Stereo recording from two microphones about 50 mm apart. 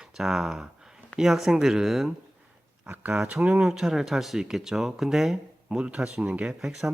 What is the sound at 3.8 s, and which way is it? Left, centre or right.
Speech, centre.